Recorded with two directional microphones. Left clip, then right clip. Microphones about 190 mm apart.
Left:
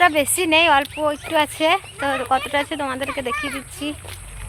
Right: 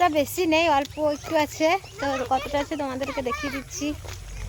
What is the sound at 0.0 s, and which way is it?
Speech, 5° left (ahead or behind).